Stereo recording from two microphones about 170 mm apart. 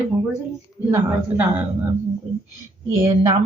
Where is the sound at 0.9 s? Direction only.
10° right (ahead or behind).